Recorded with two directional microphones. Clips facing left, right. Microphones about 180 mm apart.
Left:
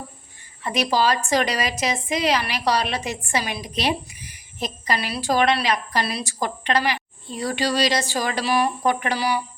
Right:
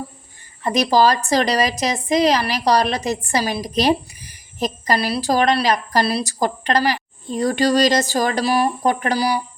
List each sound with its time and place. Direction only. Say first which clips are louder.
0.6 s a woman's voice: right 5 dB; 40° right (ahead or behind)